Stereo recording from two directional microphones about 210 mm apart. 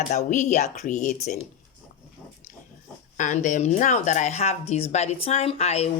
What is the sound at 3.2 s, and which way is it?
Speech, 35° left (ahead or behind).